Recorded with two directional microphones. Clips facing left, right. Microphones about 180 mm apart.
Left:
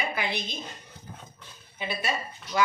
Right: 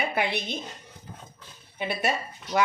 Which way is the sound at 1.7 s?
60° right (ahead or behind).